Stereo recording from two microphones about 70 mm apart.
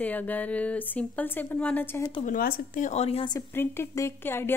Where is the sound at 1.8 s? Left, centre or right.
Left.